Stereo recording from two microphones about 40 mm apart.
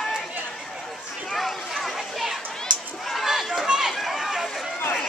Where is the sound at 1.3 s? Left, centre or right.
Centre.